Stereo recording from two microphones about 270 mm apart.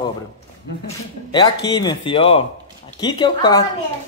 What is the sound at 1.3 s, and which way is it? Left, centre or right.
Speech, centre.